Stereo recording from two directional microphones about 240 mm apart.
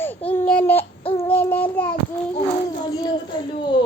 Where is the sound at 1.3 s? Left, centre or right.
Centre.